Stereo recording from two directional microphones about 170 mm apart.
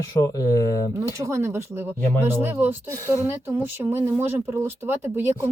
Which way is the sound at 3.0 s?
15° left (ahead or behind).